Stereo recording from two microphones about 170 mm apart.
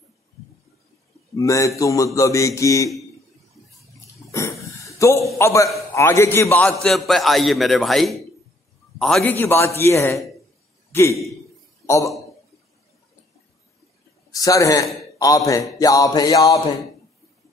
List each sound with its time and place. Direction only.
1.3 s speech: 20° left (ahead or behind)
1.8 s music: 20° left (ahead or behind)
4.3 s a sound: 20° left (ahead or behind)
5.4 s a man's voice: 15° left (ahead or behind)
11.8 s a sound: 15° left (ahead or behind)
14.3 s a man's voice: 20° left (ahead or behind)
15.8 s music: 20° left (ahead or behind)